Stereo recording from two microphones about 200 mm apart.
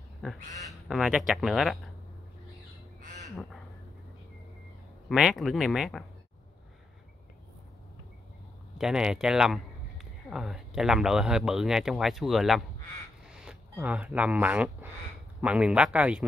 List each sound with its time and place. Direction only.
0.7 s speech: centre (ahead or behind)
3.0 s bird: 40° right (ahead or behind)
5.1 s speech: centre (ahead or behind)
8.7 s speech: 5° right (ahead or behind)